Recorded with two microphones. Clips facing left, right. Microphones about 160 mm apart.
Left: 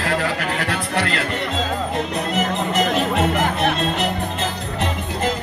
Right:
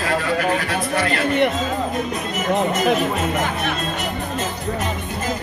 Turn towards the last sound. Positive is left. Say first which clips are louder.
# left 4 dB
turn(degrees=65)  # may be behind; listen again after turning